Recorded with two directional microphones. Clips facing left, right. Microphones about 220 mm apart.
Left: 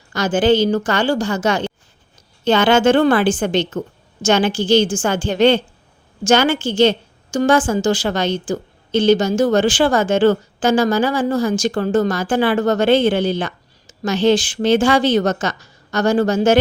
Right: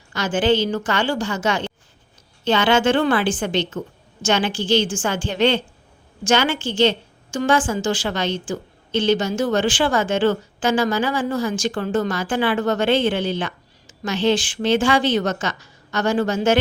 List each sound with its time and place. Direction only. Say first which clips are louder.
0.1 s a woman's voice: left 4 dB; 40° left (ahead or behind)